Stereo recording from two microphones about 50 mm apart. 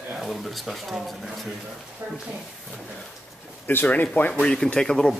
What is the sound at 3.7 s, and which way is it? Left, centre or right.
Speech, left.